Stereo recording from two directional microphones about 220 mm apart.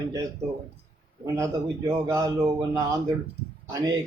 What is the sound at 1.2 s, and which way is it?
A man's voice, 15° right (ahead or behind).